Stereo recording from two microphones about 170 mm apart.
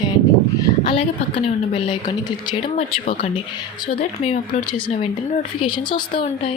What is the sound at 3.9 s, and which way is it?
A woman's voice, 40° left (ahead or behind).